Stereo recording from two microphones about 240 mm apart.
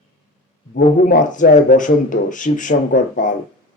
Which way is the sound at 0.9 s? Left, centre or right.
Left.